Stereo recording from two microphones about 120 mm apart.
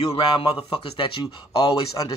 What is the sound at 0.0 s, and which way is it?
Speech, 50° left (ahead or behind).